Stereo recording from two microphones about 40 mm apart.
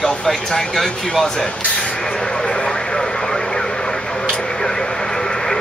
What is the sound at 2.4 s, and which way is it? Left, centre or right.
Radio, left.